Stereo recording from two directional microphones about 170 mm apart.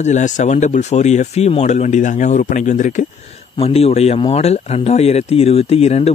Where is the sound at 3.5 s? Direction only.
35° left (ahead or behind).